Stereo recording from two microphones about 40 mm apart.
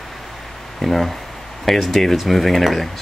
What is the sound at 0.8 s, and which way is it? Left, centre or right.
Speech, centre.